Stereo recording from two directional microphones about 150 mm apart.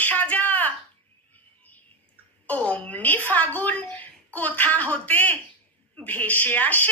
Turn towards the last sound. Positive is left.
turn(degrees=10)  # may be behind; listen again after turning